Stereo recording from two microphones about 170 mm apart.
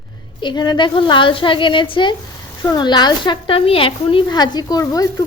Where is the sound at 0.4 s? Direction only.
25° left (ahead or behind).